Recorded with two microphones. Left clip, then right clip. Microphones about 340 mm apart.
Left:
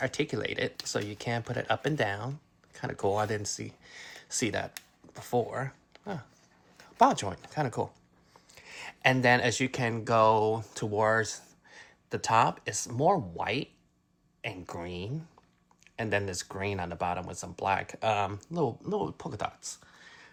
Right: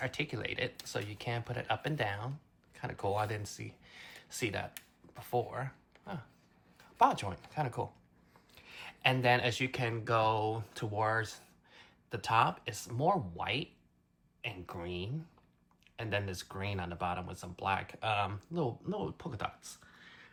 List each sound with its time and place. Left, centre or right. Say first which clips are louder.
0.0 s speech: left 6 dB; centre